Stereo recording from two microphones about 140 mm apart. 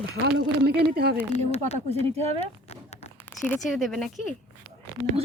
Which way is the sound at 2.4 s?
50° left (ahead or behind).